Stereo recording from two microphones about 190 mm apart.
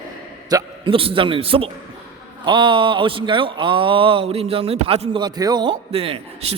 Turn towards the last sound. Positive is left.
turn(degrees=-30)  # may be behind; listen again after turning